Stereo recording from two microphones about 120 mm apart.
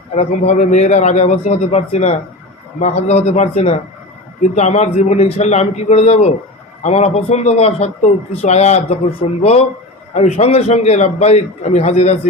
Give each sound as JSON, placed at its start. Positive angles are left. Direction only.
{"t": 0.2, "sound": "a man's voice", "side_deg": 80}
{"t": 4.5, "sound": "a man's voice", "side_deg": 70}
{"t": 10.2, "sound": "a man's voice", "side_deg": 65}